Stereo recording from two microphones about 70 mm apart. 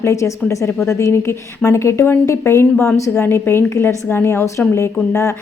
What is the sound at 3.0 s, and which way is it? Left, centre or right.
Speech, left.